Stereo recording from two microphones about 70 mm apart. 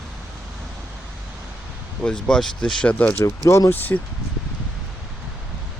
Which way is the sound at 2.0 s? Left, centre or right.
Centre.